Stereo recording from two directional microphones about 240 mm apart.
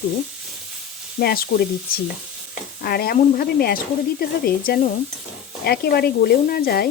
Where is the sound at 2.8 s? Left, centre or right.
Left.